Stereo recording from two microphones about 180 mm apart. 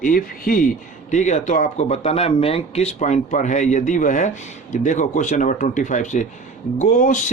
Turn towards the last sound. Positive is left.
turn(degrees=45)  # may be behind; listen again after turning